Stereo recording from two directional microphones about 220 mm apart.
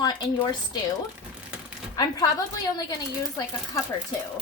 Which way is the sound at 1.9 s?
15° left (ahead or behind).